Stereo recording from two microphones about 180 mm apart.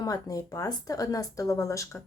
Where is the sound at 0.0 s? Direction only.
20° left (ahead or behind).